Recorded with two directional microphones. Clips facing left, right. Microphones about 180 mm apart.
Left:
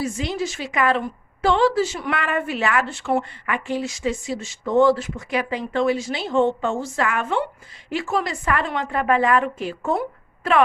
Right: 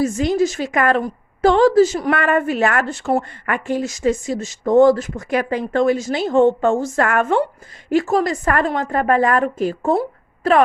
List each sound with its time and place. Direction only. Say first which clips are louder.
0.0 s a woman's voice: right 8 dB; 45° right (ahead or behind)